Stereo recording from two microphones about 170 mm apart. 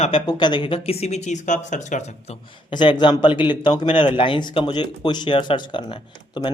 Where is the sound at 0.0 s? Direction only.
30° left (ahead or behind).